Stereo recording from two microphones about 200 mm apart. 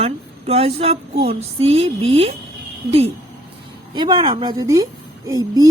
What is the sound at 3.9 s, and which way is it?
A woman's voice, 25° right (ahead or behind).